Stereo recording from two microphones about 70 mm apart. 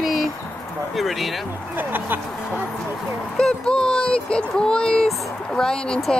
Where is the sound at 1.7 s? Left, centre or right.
Right.